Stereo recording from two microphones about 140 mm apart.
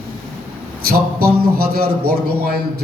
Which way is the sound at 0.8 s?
90° right.